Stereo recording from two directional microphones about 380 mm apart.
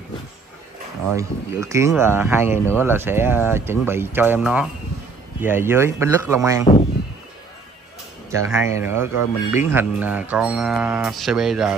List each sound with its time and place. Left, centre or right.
1.1 s speech: centre
6.6 s speech: centre
8.3 s speech: centre